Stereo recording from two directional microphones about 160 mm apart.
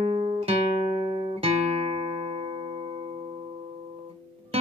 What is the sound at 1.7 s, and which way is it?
Music, 40° right (ahead or behind).